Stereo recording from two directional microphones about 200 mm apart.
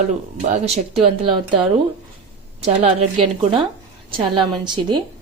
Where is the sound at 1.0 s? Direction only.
25° right (ahead or behind).